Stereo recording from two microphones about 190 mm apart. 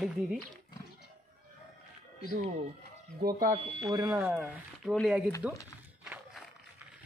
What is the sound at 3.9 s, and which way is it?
Speech, 20° right (ahead or behind).